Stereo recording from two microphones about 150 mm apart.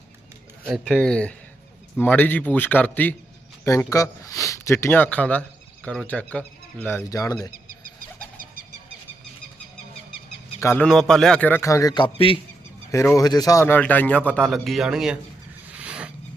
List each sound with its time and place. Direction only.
0.6 s a man's voice: 5° right (ahead or behind); by 7.3 s 20° left (ahead or behind)
10.6 s a man's voice: 15° left (ahead or behind)
10.8 s a man's voice: 5° left (ahead or behind); by 12.4 s 35° left (ahead or behind)
12.9 s a man's voice: 20° left (ahead or behind); by 15.2 s 5° right (ahead or behind)
15.8 s a sound: 5° right (ahead or behind)